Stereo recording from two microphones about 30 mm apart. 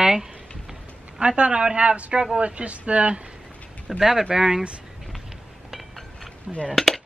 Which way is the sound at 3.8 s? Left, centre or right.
Centre.